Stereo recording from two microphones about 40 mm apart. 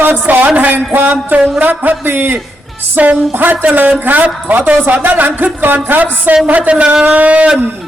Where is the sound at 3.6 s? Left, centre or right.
Right.